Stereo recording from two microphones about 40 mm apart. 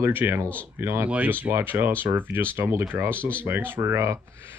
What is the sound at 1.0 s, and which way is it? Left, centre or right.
Speech, right.